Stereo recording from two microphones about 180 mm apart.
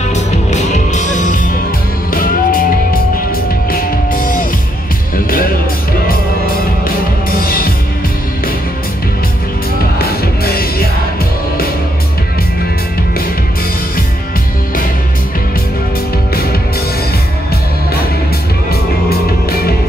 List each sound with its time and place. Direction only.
0.1 s music: 40° left (ahead or behind)
7.2 s music: 55° left (ahead or behind)
9.9 s music: 60° left (ahead or behind)
18.7 s music: 60° left (ahead or behind)